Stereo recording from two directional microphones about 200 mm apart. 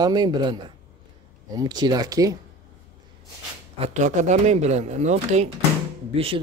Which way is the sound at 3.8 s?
35° right (ahead or behind).